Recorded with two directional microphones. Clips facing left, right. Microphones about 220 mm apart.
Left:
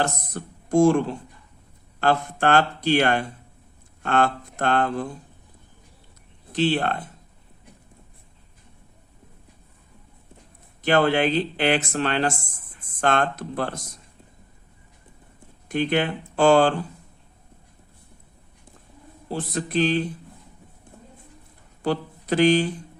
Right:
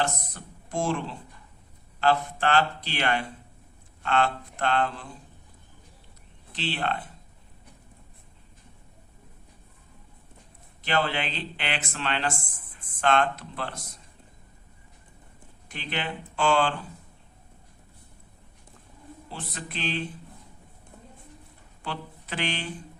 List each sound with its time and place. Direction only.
0.0 s speech: 45° left (ahead or behind)
6.5 s speech: 45° left (ahead or behind)
10.8 s speech: 50° left (ahead or behind)
15.7 s speech: 50° left (ahead or behind)
19.3 s a sound: 40° left (ahead or behind)
21.8 s speech: 40° left (ahead or behind)